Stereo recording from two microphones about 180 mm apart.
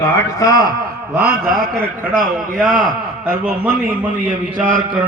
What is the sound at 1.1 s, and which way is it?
Speech, 15° right (ahead or behind).